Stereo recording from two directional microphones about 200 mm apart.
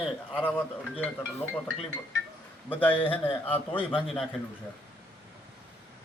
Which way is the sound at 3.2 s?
25° left (ahead or behind).